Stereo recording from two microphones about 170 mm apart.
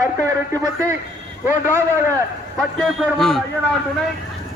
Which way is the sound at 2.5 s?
Centre (ahead or behind).